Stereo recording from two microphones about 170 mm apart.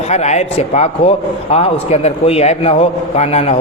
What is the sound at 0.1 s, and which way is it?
A man's voice, 40° left (ahead or behind).